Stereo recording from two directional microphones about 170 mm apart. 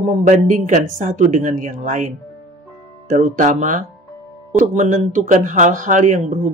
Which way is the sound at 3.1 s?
45° right (ahead or behind).